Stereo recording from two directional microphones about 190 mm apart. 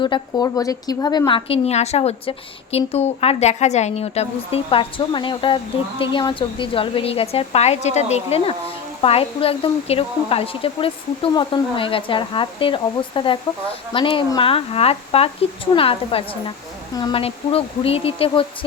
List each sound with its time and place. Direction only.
0.0 s a woman's voice: 20° left (ahead or behind)